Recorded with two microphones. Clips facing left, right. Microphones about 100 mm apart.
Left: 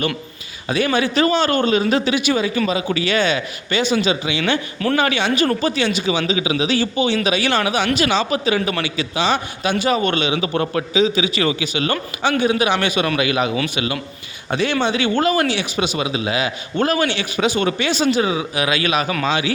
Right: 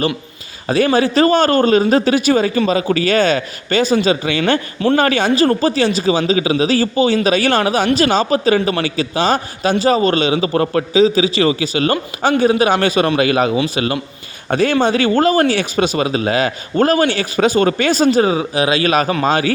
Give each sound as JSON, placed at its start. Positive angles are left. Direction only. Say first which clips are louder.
{"t": 0.7, "sound": "a man's voice", "louder": "right 5 dB", "side_deg": -35}